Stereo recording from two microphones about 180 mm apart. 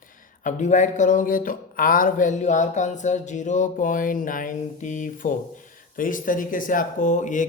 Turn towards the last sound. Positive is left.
turn(degrees=45)  # may be behind; listen again after turning